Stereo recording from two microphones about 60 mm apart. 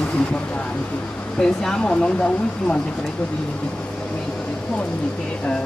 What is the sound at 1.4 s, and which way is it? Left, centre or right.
Speech, centre.